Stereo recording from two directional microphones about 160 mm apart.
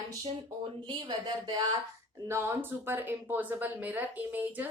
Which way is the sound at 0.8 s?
30° right (ahead or behind).